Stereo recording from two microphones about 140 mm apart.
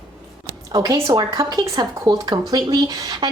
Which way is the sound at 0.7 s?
25° right (ahead or behind).